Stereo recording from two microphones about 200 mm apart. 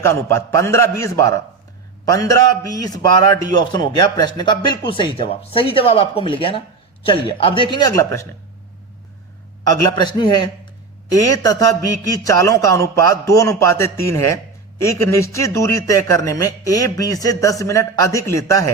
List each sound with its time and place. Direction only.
0.0 s a man's voice: 15° left (ahead or behind)
9.9 s a man's voice: 20° left (ahead or behind)